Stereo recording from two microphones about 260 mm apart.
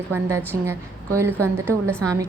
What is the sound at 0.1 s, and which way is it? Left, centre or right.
A woman's voice, centre.